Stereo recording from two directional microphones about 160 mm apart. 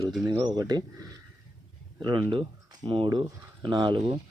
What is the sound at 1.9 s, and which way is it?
Speech, 30° right (ahead or behind).